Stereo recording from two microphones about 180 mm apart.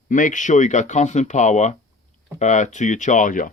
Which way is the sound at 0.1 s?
45° left (ahead or behind).